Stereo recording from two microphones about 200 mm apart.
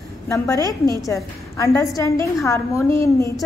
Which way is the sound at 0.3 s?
15° left (ahead or behind).